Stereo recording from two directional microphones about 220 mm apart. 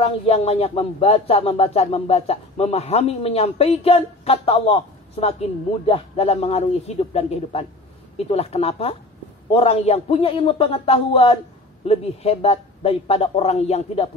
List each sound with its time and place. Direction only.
0.0 s speech: 30° left (ahead or behind)
5.9 s speech: 25° left (ahead or behind)